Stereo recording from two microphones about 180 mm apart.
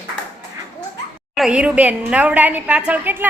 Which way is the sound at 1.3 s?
5° right (ahead or behind).